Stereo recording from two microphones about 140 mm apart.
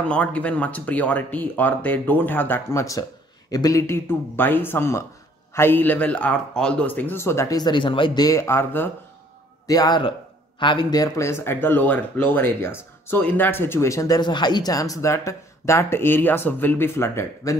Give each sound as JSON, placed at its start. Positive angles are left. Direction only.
{"t": 0.1, "sound": "speech", "side_deg": 10}
{"t": 9.7, "sound": "speech", "side_deg": 30}